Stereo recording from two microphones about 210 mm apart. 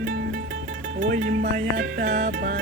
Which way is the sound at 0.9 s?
40° right (ahead or behind).